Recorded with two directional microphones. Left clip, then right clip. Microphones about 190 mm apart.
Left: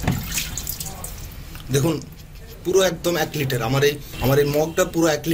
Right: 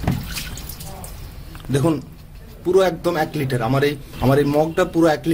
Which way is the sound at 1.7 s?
50° right (ahead or behind).